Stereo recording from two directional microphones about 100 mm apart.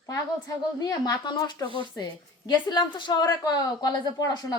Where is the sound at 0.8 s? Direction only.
40° left (ahead or behind).